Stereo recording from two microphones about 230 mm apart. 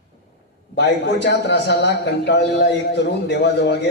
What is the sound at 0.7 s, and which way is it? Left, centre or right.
A man's voice, left.